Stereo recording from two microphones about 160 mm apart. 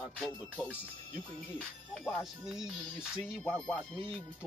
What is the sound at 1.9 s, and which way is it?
Music, centre (ahead or behind).